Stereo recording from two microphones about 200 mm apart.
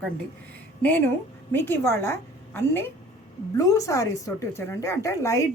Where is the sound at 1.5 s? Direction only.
10° left (ahead or behind).